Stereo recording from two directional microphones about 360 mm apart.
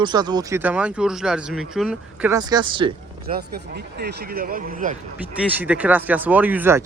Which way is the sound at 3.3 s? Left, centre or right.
Right.